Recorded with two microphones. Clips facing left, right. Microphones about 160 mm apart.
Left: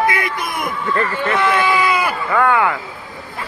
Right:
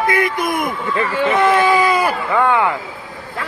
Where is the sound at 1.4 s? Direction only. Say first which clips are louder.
Right 3 dB; 40° right (ahead or behind).